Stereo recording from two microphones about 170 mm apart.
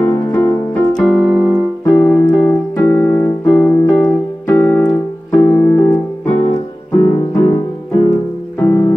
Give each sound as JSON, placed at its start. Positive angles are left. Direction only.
{"t": 0.0, "sound": "music", "side_deg": 10}
{"t": 1.0, "sound": "keyboard", "side_deg": 10}
{"t": 7.0, "sound": "music", "side_deg": 15}
{"t": 8.5, "sound": "music", "side_deg": 15}